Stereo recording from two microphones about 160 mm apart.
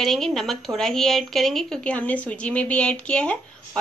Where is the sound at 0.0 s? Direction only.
5° left (ahead or behind).